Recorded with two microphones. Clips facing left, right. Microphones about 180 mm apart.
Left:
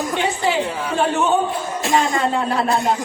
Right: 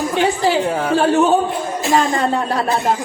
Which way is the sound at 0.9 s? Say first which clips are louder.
Right 4 dB; 35° right (ahead or behind).